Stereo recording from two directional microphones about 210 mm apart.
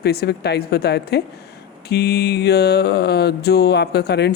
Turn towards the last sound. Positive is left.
turn(degrees=55)  # may be behind; listen again after turning